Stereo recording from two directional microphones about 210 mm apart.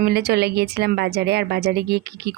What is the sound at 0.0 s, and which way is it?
Speech, 50° right (ahead or behind).